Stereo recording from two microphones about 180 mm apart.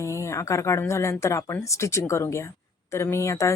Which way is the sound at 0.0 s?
15° left (ahead or behind).